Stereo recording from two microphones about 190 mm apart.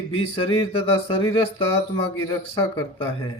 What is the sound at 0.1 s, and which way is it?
A man's voice, 30° left (ahead or behind).